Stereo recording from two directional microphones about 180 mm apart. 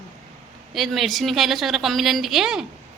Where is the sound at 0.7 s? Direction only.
Centre (ahead or behind).